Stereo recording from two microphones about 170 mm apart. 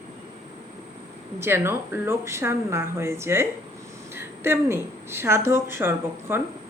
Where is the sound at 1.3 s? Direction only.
15° right (ahead or behind).